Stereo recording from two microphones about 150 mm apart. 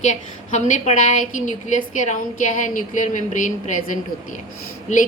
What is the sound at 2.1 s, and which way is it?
A woman's voice, 60° left (ahead or behind).